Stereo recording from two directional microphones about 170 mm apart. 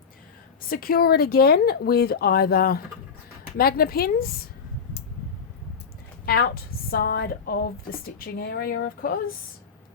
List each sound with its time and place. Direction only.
0.7 s a woman's voice: 60° left (ahead or behind)
6.2 s a woman's voice: 65° left (ahead or behind)